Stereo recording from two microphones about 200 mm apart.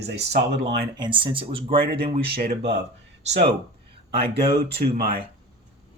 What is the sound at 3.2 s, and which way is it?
Speech, 35° right (ahead or behind).